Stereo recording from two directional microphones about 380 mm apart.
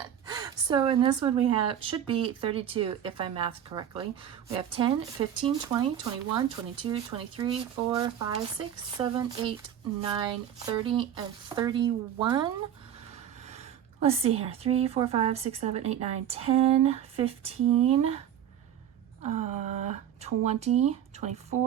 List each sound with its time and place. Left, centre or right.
0.0 s a woman's voice: centre
14.0 s a woman's voice: centre
19.2 s a woman's voice: centre